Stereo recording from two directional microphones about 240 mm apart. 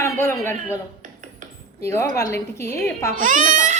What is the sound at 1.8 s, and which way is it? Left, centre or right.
A woman's voice, centre.